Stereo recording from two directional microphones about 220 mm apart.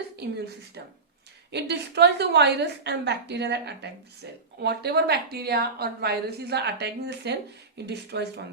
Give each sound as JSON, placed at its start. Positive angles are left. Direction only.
{"t": 1.5, "sound": "a woman's voice", "side_deg": -50}